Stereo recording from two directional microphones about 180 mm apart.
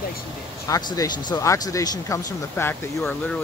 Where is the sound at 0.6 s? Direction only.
20° left (ahead or behind).